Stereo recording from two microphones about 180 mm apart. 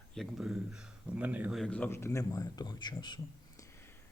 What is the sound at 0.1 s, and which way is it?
Speech, centre (ahead or behind).